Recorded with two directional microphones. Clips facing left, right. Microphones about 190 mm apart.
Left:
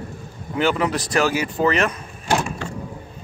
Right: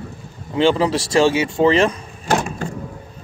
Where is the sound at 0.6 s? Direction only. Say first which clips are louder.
Right 4 dB; 30° right (ahead or behind).